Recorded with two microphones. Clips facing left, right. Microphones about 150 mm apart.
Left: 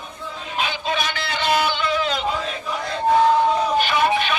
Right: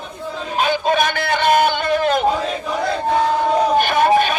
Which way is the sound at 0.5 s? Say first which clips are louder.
Right 7 dB; 45° right (ahead or behind).